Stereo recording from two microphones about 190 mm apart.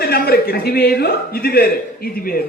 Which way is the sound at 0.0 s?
55° left (ahead or behind).